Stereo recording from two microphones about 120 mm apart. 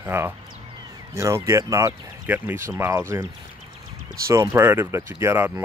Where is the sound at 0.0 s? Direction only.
20° right (ahead or behind).